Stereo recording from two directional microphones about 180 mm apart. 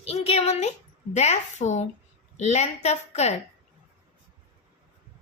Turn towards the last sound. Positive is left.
turn(degrees=35)  # may be behind; listen again after turning